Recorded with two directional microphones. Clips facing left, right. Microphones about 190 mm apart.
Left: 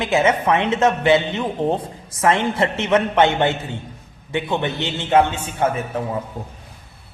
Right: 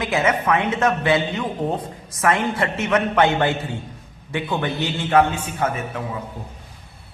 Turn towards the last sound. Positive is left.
turn(degrees=25)  # may be behind; listen again after turning